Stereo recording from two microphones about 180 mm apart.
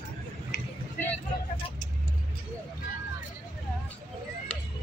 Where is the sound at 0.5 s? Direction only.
75° left (ahead or behind).